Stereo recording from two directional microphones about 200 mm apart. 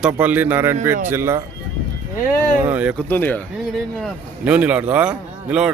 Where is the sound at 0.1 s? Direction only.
10° right (ahead or behind).